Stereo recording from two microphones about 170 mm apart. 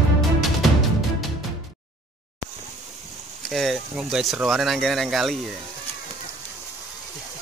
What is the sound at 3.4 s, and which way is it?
Speech, centre (ahead or behind).